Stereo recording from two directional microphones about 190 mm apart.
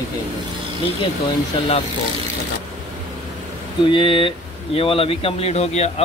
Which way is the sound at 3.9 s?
25° left (ahead or behind).